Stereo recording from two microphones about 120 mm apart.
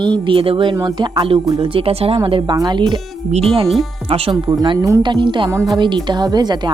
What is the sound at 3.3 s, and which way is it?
Speech, 55° right (ahead or behind).